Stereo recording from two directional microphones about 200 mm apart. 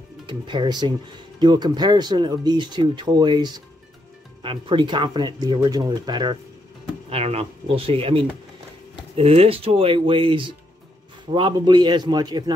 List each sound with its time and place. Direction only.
0.3 s speech: 25° right (ahead or behind)